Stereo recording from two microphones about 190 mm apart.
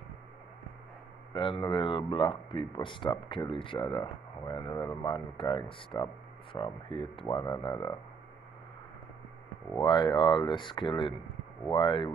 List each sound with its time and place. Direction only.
1.3 s speech: 25° left (ahead or behind)
9.8 s speech: 25° left (ahead or behind)